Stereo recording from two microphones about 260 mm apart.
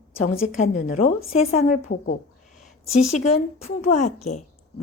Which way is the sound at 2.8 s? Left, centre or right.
Left.